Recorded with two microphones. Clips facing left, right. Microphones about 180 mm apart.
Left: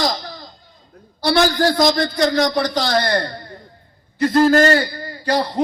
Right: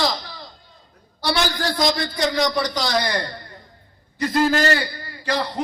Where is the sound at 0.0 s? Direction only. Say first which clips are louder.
Left 2 dB; 45° left (ahead or behind).